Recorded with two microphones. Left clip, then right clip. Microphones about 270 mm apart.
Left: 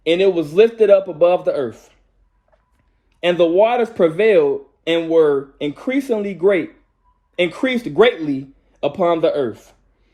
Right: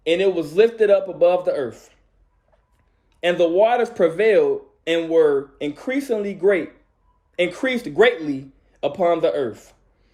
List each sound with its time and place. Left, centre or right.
0.0 s a man's voice: left
1.4 s speech: left
3.2 s speech: centre
9.4 s speech: left